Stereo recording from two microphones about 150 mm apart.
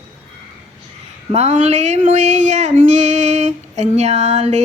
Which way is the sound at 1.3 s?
45° right (ahead or behind).